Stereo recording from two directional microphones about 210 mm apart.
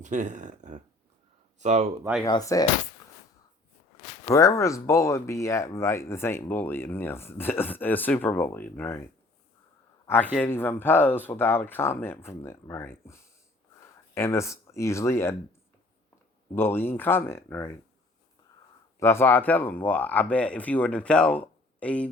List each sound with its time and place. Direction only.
0.0 s speech: 35° right (ahead or behind)
2.2 s speech: 15° left (ahead or behind)
4.3 s speech: 15° left (ahead or behind)
10.3 s speech: 10° left (ahead or behind)
16.6 s speech: 10° left (ahead or behind)
18.9 s speech: 10° left (ahead or behind)